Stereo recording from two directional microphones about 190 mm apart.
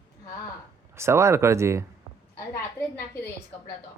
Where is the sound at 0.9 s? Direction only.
15° right (ahead or behind).